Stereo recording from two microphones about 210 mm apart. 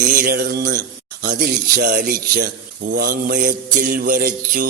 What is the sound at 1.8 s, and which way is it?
Mantra, 50° right (ahead or behind).